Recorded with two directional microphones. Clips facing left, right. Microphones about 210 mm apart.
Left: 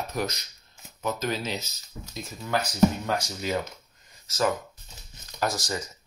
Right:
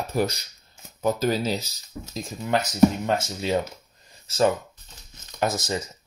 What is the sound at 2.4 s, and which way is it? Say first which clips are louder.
Speech: right 4 dB; 20° right (ahead or behind).